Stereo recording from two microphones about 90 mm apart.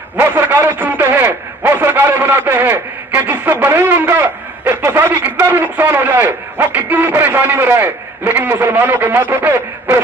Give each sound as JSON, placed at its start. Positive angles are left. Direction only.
{"t": 0.2, "sound": "a man's voice", "side_deg": -25}